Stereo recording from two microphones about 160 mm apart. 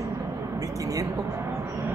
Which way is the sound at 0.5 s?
20° right (ahead or behind).